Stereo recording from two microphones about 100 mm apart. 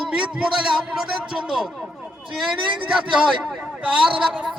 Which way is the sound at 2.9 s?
10° right (ahead or behind).